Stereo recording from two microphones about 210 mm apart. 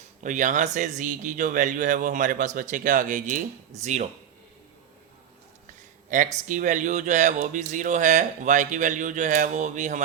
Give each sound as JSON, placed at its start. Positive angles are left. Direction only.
{"t": 0.2, "sound": "speech", "side_deg": -35}
{"t": 6.1, "sound": "speech", "side_deg": -35}